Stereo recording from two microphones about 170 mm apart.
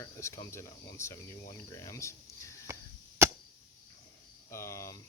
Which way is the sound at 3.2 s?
15° right (ahead or behind).